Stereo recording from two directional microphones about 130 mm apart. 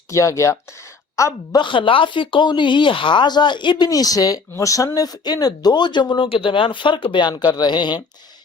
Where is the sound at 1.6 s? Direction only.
40° left (ahead or behind).